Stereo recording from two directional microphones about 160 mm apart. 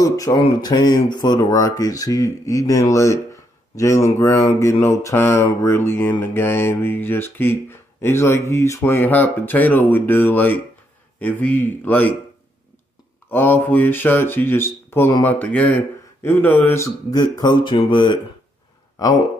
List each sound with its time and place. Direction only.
0.0 s speech: 20° left (ahead or behind)
3.7 s mantra: 20° left (ahead or behind)
13.3 s mantra: 10° left (ahead or behind); by 18.1 s 30° left (ahead or behind)
19.0 s speech: 20° left (ahead or behind)